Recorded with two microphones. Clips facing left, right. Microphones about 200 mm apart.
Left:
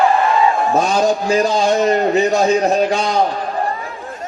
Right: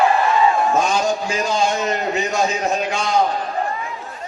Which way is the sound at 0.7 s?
35° left (ahead or behind).